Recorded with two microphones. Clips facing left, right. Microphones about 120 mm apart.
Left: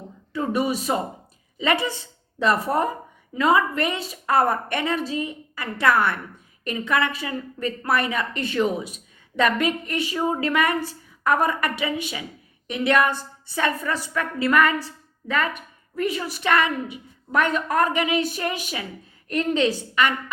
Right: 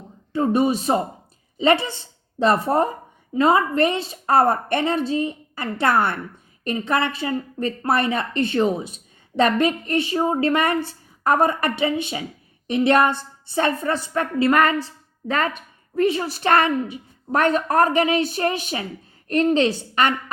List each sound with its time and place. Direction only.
0.3 s a woman's voice: 30° right (ahead or behind)